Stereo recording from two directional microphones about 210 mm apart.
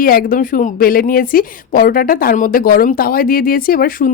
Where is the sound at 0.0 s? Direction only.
45° left (ahead or behind).